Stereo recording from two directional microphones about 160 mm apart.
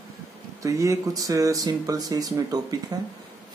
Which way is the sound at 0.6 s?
20° right (ahead or behind).